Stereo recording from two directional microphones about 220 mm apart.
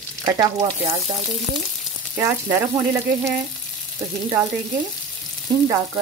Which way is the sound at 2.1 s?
10° right (ahead or behind).